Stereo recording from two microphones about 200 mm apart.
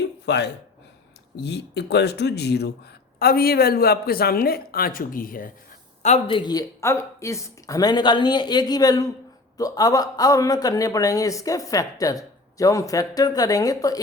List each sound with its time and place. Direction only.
0.0 s gasp: 60° left (ahead or behind)
1.4 s speech: 55° left (ahead or behind)
6.0 s a man's voice: 30° left (ahead or behind)